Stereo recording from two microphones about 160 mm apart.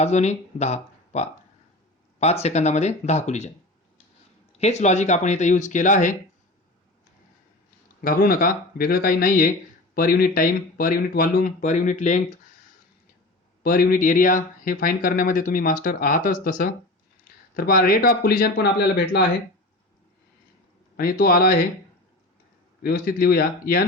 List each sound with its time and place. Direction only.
0.0 s speech: 45° left (ahead or behind)
4.5 s speech: 45° left (ahead or behind)
8.0 s speech: 65° left (ahead or behind)
13.6 s speech: 65° left (ahead or behind); by 19.2 s 80° left
20.9 s speech: 70° left (ahead or behind)
22.8 s speech: 70° left (ahead or behind)